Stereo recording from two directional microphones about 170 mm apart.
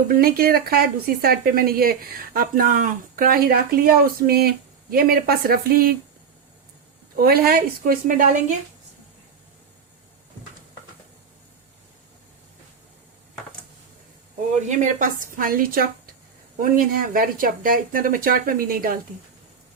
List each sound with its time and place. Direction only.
0.1 s a woman's voice: 60° right (ahead or behind)
7.2 s a woman's voice: 65° right (ahead or behind)
14.7 s a woman's voice: 45° right (ahead or behind)